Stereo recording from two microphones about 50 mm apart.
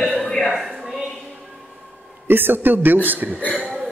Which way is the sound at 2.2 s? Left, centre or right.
Right.